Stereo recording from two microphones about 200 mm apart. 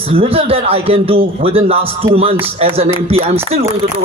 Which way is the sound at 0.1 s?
30° right (ahead or behind).